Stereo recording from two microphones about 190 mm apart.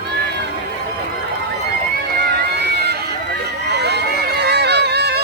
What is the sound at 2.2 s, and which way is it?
Music, 60° right (ahead or behind).